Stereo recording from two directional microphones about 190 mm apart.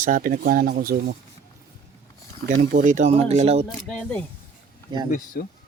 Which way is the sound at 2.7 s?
45° right (ahead or behind).